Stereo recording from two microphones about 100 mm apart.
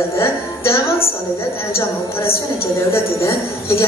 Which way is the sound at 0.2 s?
25° left (ahead or behind).